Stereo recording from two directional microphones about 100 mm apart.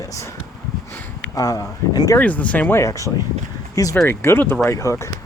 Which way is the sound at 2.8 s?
30° left (ahead or behind).